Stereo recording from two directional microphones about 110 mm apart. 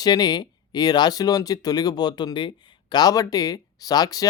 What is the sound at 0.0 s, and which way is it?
Speech, 40° left (ahead or behind).